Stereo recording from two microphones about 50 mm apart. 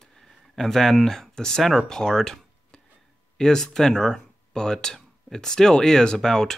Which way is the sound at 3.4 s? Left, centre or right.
Centre.